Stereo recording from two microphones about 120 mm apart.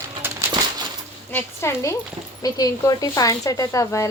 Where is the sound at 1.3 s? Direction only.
20° left (ahead or behind).